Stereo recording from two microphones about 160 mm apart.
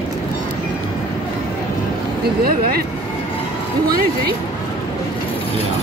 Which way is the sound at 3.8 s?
70° right (ahead or behind).